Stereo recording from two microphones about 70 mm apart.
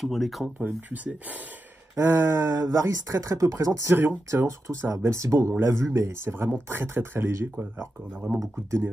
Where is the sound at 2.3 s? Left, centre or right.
Right.